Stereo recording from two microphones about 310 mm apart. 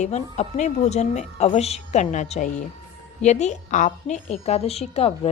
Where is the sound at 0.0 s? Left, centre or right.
Left.